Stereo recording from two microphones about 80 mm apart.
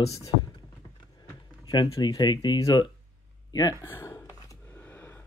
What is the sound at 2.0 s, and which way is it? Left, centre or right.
Speech, left.